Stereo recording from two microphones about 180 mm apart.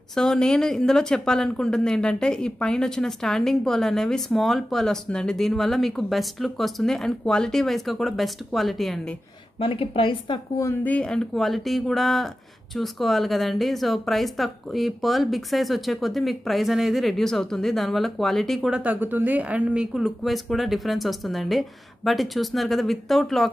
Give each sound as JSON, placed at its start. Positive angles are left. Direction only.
{"t": 0.1, "sound": "speech", "side_deg": 5}
{"t": 9.6, "sound": "a woman's voice", "side_deg": 30}
{"t": 10.6, "sound": "speech", "side_deg": 10}